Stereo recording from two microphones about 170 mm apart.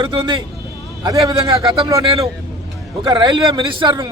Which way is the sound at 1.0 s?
25° right (ahead or behind).